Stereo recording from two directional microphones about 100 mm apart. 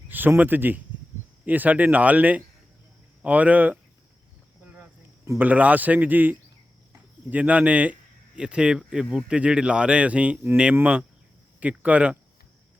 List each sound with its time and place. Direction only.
0.1 s speech: 20° right (ahead or behind)
4.6 s cricket: 15° right (ahead or behind)
5.4 s speech: 15° right (ahead or behind)